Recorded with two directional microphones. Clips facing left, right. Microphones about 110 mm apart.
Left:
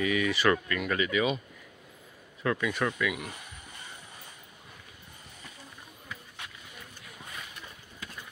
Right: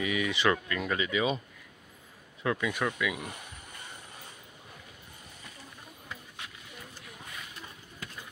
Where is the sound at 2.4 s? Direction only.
15° right (ahead or behind).